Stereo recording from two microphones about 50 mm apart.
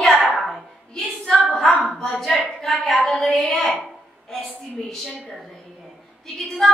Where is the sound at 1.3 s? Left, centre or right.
Centre.